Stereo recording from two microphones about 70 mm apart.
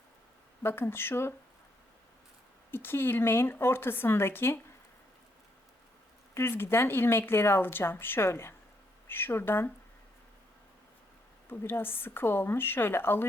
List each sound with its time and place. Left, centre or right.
0.6 s speech: left
2.7 s speech: left
6.3 s speech: left
11.4 s speech: left